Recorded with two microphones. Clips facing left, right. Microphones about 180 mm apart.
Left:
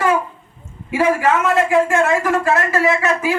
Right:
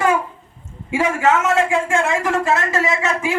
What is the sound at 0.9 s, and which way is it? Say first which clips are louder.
A man's voice: left 1 dB; 20° right (ahead or behind).